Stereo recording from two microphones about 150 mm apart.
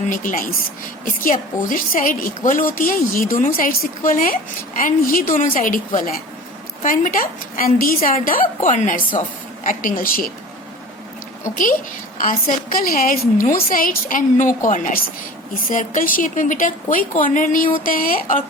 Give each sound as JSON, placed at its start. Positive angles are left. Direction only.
{"t": 0.1, "sound": "a woman's voice", "side_deg": 65}
{"t": 9.6, "sound": "a woman's voice", "side_deg": 65}
{"t": 11.5, "sound": "a woman's voice", "side_deg": 65}